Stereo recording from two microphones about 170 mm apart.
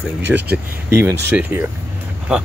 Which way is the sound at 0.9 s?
10° right (ahead or behind).